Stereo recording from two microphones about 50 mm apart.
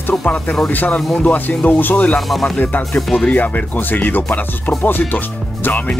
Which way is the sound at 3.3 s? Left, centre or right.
Left.